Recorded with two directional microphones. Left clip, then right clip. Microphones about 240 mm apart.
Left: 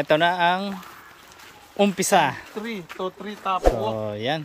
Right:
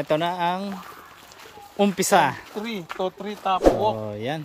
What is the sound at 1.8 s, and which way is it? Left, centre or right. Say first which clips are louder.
Speech: even; centre.